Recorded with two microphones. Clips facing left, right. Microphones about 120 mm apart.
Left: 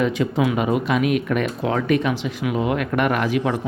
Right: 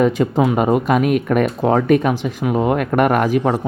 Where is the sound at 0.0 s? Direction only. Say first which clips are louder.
Right 5 dB; 45° right (ahead or behind).